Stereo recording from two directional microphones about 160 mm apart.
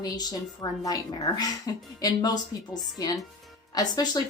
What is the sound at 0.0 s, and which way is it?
A woman's voice, 25° left (ahead or behind).